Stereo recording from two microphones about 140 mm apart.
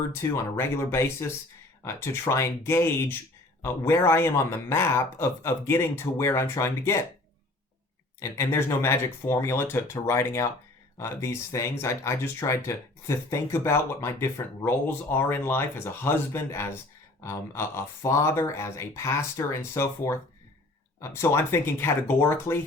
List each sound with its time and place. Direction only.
0.1 s speech: 15° left (ahead or behind)
8.2 s speech: 20° left (ahead or behind)